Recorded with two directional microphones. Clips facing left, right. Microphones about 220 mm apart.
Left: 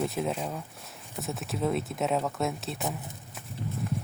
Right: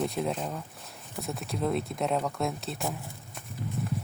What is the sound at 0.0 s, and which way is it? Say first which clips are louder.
Speech: even; 5° left (ahead or behind).